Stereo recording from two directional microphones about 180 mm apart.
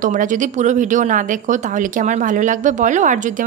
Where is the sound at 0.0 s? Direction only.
45° right (ahead or behind).